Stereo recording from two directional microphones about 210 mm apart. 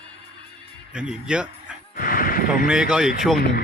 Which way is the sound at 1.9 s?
45° left (ahead or behind).